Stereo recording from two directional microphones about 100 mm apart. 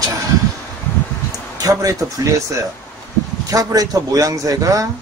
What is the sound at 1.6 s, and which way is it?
Speech, 35° right (ahead or behind).